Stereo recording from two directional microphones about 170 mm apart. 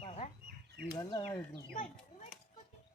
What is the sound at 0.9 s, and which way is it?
Speech, 20° left (ahead or behind).